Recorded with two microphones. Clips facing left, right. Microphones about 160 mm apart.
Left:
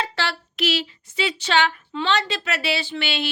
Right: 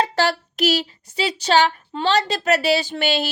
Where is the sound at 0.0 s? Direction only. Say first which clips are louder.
Right 7 dB; 40° right (ahead or behind).